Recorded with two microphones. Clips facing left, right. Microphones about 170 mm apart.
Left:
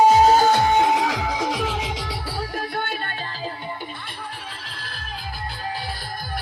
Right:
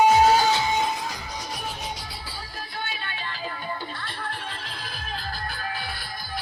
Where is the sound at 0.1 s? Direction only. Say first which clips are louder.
Left 3 dB; 45° left (ahead or behind).